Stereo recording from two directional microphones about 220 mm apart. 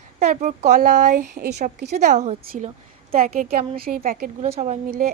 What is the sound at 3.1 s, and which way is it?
Speech, 40° right (ahead or behind).